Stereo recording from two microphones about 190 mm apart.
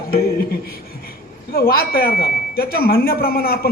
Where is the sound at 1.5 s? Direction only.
50° left (ahead or behind).